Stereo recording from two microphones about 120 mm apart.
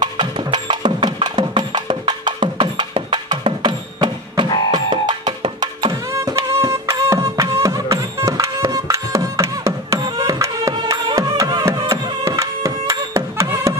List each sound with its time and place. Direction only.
0.0 s music: 40° right (ahead or behind)
6.1 s music: 25° right (ahead or behind)